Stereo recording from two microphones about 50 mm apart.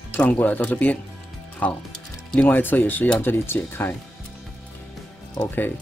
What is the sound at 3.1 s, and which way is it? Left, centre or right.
Speech, left.